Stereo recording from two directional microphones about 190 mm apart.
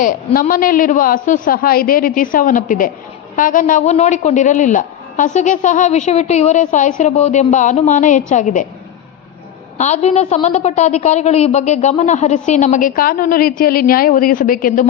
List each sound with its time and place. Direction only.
0.0 s a woman's voice: 40° left (ahead or behind)
9.7 s a woman's voice: 35° left (ahead or behind)